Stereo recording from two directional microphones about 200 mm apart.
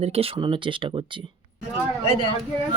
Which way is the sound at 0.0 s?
30° right (ahead or behind).